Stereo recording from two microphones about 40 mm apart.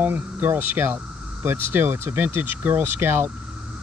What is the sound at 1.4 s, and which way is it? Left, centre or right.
Speech, right.